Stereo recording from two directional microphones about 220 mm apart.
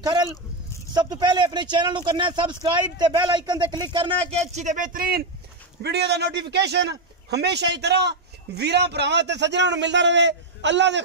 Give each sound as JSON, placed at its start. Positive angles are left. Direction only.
{"t": 0.0, "sound": "a man's voice", "side_deg": -20}